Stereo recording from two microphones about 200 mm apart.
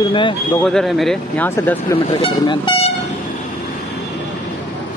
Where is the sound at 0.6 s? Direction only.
Centre (ahead or behind).